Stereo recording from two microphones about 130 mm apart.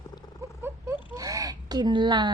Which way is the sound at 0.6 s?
15° right (ahead or behind).